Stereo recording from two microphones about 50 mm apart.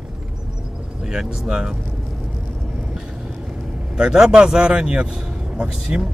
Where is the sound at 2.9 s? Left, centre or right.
Centre.